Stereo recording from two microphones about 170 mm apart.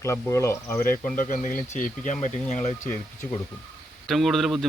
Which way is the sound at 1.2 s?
50° left (ahead or behind).